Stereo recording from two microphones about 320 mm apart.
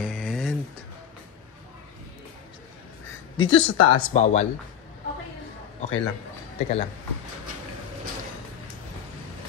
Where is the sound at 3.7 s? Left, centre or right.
Left.